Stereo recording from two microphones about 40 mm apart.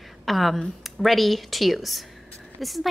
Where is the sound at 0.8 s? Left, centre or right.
Centre.